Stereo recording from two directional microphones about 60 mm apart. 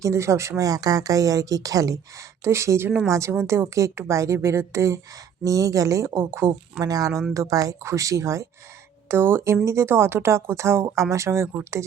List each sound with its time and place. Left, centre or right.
0.0 s speech: right
2.4 s a woman's voice: right
5.4 s speech: right
6.8 s speech: right
7.9 s speech: right
9.0 s a woman's voice: right